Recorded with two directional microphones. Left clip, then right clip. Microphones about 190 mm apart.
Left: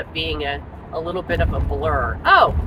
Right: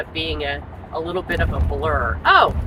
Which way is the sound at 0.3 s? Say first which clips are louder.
Even; 20° left (ahead or behind).